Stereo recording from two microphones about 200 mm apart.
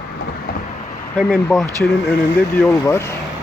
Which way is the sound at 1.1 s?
5° left (ahead or behind).